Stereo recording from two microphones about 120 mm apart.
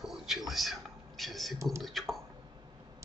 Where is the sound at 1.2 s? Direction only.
Centre (ahead or behind).